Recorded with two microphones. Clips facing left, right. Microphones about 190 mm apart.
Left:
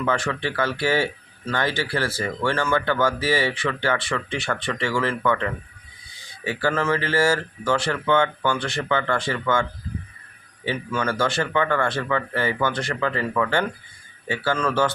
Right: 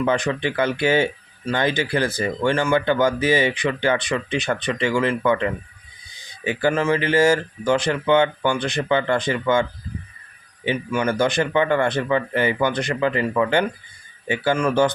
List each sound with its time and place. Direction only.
0.0 s speech: 20° right (ahead or behind)
10.7 s speech: 15° right (ahead or behind)